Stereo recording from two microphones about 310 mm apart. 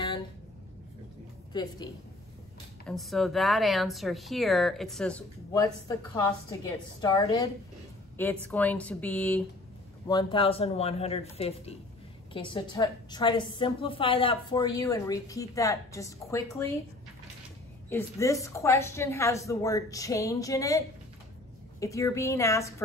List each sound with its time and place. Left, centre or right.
1.5 s a woman's voice: centre
2.9 s a woman's voice: centre
17.8 s a woman's voice: centre